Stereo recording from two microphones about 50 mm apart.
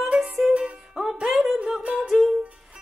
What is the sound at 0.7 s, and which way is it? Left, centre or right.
Music, centre.